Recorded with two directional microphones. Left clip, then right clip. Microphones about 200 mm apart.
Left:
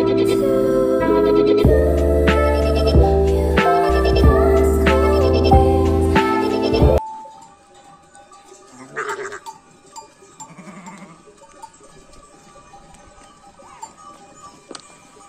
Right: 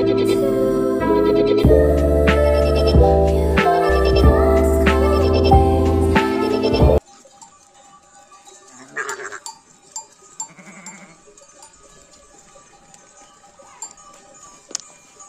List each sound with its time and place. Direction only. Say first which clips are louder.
0.0 s music: even; centre (ahead or behind)
8.9 s goat: left 1 dB; 35° left (ahead or behind)